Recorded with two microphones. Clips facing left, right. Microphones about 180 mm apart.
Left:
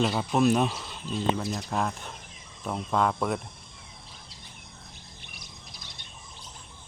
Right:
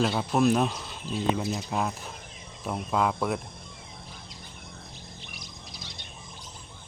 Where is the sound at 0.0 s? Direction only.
Centre (ahead or behind).